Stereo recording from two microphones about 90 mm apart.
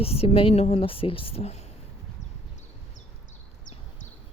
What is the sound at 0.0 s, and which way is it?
A woman's voice, 90° left.